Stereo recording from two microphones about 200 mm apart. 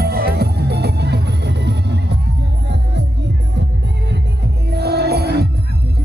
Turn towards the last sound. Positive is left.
turn(degrees=-55)  # may be behind; listen again after turning